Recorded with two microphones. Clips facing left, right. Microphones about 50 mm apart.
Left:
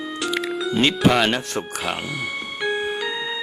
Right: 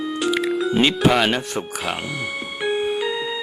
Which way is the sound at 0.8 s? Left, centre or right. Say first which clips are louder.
Left 1 dB; centre.